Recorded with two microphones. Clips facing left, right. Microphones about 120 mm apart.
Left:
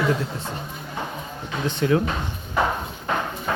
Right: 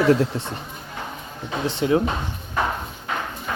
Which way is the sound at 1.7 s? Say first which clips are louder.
Right 1 dB; 25° right (ahead or behind).